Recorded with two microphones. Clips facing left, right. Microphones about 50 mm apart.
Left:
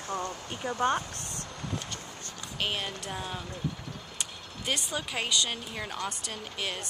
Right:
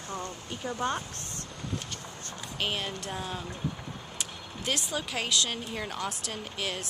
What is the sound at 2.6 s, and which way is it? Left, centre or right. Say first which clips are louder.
Speech: even; centre.